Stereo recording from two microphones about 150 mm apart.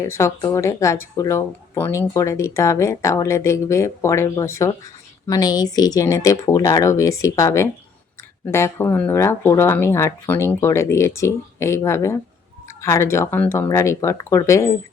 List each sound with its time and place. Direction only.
0.0 s speech: 20° left (ahead or behind)